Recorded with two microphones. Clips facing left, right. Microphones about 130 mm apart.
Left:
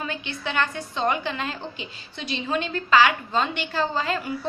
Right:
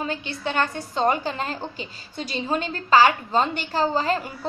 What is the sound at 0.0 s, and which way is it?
A woman's voice, 35° right (ahead or behind).